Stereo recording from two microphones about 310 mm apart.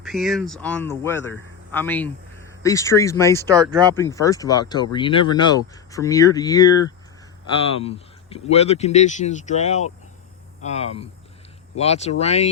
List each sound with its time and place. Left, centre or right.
0.0 s speech: centre
3.4 s speech: centre
3.9 s speech: centre